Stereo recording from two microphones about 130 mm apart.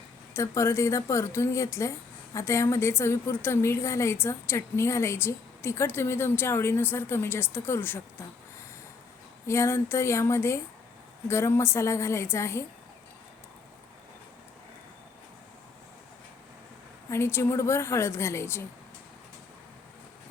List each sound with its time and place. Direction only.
0.3 s speech: 20° left (ahead or behind)
9.5 s speech: 20° left (ahead or behind)
17.1 s speech: 20° left (ahead or behind)